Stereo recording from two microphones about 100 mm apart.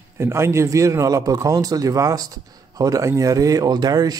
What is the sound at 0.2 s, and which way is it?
A man's voice, 30° right (ahead or behind).